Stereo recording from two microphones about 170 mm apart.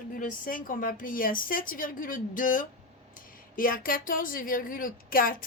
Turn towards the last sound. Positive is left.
turn(degrees=55)  # may be behind; listen again after turning